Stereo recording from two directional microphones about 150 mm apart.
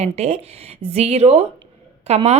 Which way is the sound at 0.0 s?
50° right (ahead or behind).